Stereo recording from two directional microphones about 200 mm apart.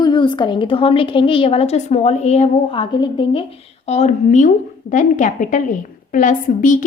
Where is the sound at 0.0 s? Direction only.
25° left (ahead or behind).